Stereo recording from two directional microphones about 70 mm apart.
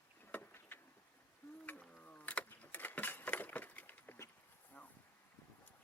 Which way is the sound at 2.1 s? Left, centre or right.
Centre.